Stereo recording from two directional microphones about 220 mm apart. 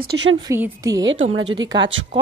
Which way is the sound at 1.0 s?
60° right (ahead or behind).